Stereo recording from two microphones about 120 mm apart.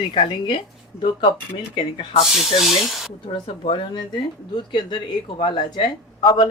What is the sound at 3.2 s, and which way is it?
A woman's voice, 50° left (ahead or behind).